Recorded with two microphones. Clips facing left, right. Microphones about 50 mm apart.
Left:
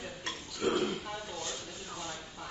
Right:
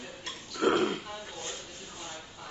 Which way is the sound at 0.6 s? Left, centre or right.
Right.